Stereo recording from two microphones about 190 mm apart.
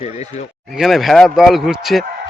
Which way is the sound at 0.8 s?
Centre (ahead or behind).